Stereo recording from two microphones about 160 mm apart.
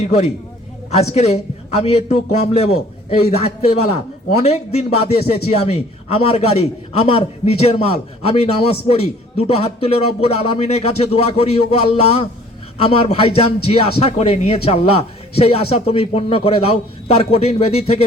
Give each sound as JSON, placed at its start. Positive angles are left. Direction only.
{"t": 0.0, "sound": "a man's voice", "side_deg": 40}